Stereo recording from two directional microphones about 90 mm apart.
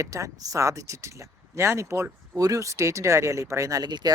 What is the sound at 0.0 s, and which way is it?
Speech, 35° right (ahead or behind).